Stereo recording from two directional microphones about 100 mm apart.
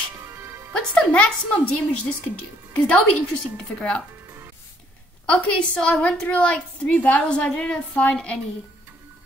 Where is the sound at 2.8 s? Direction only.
10° left (ahead or behind).